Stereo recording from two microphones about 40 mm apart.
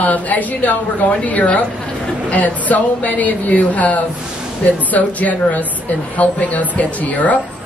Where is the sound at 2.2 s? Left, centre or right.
Left.